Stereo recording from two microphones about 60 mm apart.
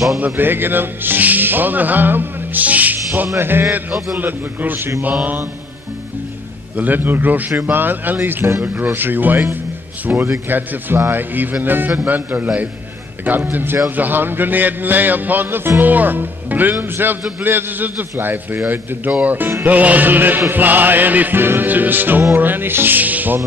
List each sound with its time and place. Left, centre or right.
0.2 s speech: right
3.3 s music: right
6.8 s music: right
10.1 s a man's voice: right
10.5 s music: right
12.0 s a man's voice: right
13.2 s music: right